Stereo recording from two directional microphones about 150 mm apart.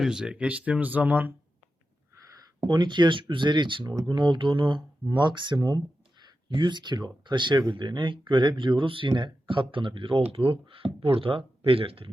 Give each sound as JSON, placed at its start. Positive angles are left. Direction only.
{"t": 0.0, "sound": "speech", "side_deg": -5}
{"t": 2.6, "sound": "speech", "side_deg": -30}